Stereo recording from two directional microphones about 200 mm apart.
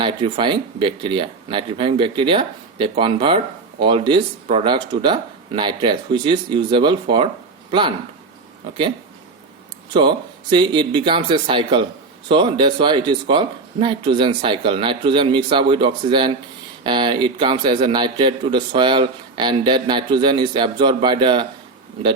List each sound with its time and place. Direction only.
0.0 s speech: 25° right (ahead or behind)
9.9 s speech: 25° right (ahead or behind)